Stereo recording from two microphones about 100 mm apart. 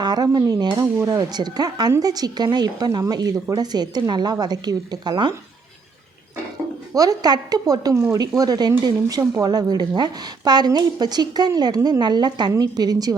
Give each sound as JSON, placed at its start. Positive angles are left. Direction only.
{"t": 0.0, "sound": "speech", "side_deg": -45}
{"t": 0.9, "sound": "speech", "side_deg": -30}
{"t": 1.3, "sound": "a woman's voice", "side_deg": -45}
{"t": 6.9, "sound": "a woman's voice", "side_deg": -35}
{"t": 7.9, "sound": "speech", "side_deg": -25}
{"t": 8.4, "sound": "a woman's voice", "side_deg": -40}